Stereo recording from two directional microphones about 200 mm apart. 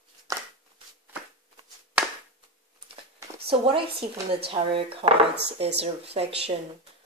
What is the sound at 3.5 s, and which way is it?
Speech, 25° right (ahead or behind).